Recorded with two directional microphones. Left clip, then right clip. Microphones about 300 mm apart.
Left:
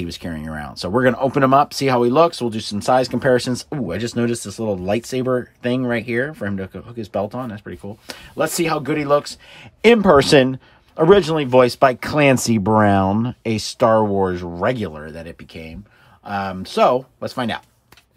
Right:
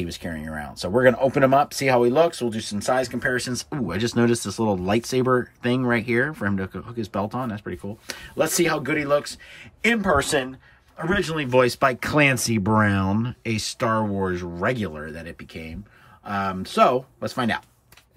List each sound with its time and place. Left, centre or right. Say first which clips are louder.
0.0 s speech: left 2 dB; centre
11.1 s speech: left 6 dB; centre